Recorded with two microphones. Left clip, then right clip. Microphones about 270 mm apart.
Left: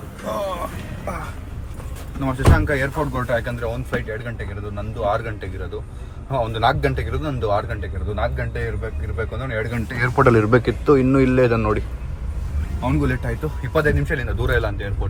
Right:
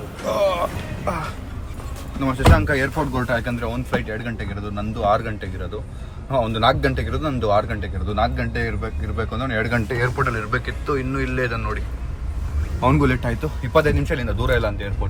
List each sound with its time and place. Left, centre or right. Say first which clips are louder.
0.3 s a sound: right 5 dB; centre
2.2 s speech: right 2 dB; centre
10.2 s speech: left 7 dB; centre
13.0 s speech: right 3 dB; centre
13.7 s speech: right 2 dB; centre